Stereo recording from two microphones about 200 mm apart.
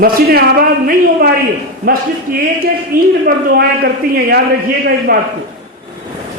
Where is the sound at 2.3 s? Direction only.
45° right (ahead or behind).